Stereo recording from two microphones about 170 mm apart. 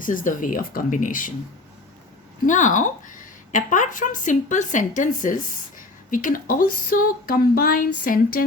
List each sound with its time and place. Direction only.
0.0 s a woman's voice: 50° left (ahead or behind)
2.5 s a woman's voice: 50° left (ahead or behind)